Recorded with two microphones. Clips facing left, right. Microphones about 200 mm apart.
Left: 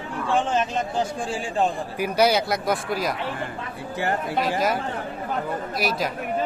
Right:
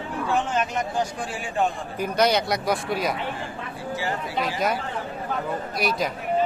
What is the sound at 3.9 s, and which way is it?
Speech, 55° left (ahead or behind).